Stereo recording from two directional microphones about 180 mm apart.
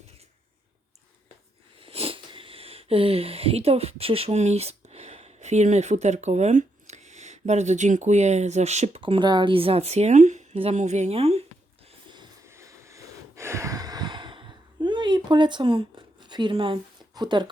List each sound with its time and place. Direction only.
1.8 s speech: 30° right (ahead or behind)
12.5 s a sound: 15° right (ahead or behind)
16.2 s speech: 25° right (ahead or behind)